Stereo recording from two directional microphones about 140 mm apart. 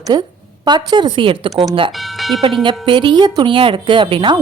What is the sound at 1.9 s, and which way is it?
Speech, centre (ahead or behind).